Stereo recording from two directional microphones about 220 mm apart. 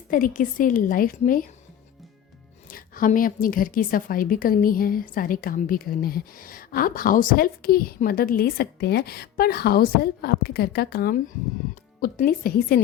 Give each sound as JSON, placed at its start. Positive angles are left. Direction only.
{"t": 0.1, "sound": "a woman's voice", "side_deg": 40}
{"t": 2.6, "sound": "a woman's voice", "side_deg": 40}